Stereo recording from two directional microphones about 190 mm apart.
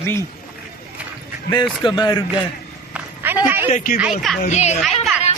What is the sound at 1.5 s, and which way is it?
Speech, 25° left (ahead or behind).